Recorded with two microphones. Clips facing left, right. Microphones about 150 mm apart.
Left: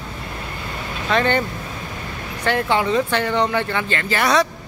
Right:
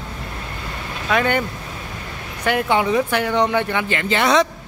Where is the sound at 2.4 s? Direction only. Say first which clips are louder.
Right 1 dB; 15° right (ahead or behind).